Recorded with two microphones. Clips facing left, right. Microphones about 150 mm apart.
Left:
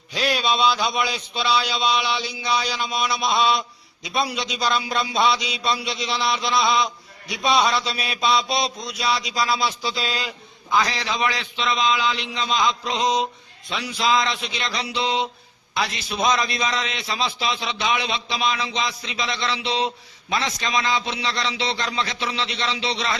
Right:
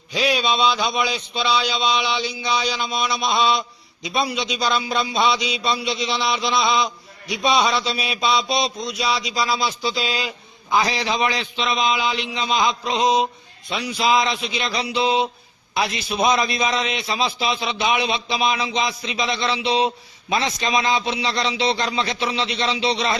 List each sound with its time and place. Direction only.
0.1 s a man's voice: centre (ahead or behind); by 23.1 s 15° right (ahead or behind)